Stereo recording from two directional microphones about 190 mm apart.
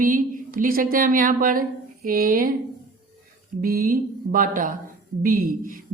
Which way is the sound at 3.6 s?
50° right (ahead or behind).